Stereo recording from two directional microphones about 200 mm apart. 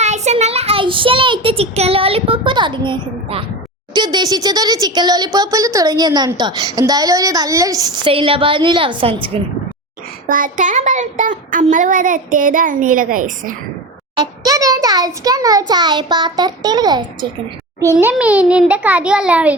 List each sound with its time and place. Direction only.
0.0 s speech: 35° right (ahead or behind)
10.2 s a child's voice: 40° right (ahead or behind)
14.2 s speech: 15° right (ahead or behind)
17.9 s a child's voice: 5° right (ahead or behind)